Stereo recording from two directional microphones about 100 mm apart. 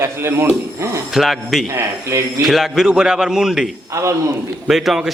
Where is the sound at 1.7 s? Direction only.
30° right (ahead or behind).